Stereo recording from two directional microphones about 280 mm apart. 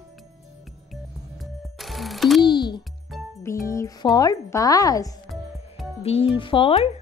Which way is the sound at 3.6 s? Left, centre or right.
Centre.